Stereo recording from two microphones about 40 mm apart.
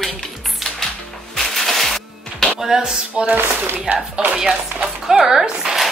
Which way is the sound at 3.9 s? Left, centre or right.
Right.